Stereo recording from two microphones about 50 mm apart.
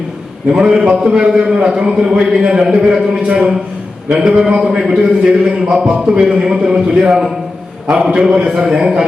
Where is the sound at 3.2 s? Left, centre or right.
Right.